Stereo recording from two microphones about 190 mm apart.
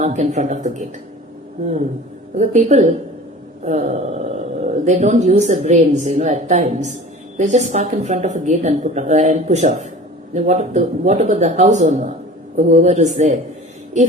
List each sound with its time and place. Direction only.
0.0 s a woman's voice: 35° right (ahead or behind)
2.3 s a woman's voice: 40° right (ahead or behind)